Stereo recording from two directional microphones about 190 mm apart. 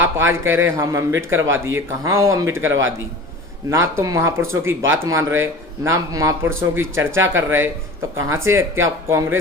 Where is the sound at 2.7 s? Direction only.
90° right.